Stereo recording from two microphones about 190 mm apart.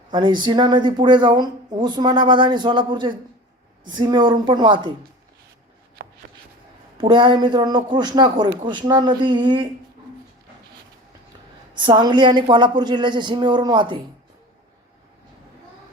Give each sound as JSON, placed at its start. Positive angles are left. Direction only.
{"t": 0.1, "sound": "speech", "side_deg": -25}
{"t": 7.0, "sound": "speech", "side_deg": -25}
{"t": 11.9, "sound": "speech", "side_deg": -25}